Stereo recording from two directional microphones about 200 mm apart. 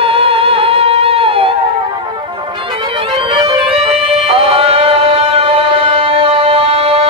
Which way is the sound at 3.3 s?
20° right (ahead or behind).